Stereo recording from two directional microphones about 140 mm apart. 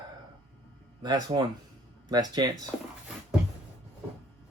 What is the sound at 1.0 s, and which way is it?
Speech, 30° right (ahead or behind).